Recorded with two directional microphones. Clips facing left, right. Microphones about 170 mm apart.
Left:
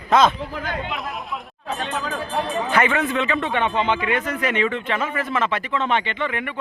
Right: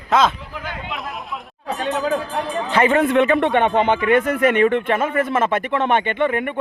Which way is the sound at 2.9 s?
55° right (ahead or behind).